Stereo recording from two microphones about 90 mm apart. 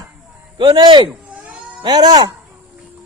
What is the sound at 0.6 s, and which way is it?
A man's voice, 60° right (ahead or behind).